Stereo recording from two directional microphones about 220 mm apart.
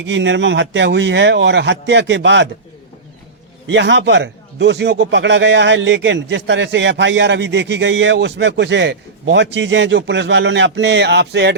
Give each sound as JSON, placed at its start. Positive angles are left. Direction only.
{"t": 0.1, "sound": "speech", "side_deg": -55}
{"t": 3.7, "sound": "a man's voice", "side_deg": -55}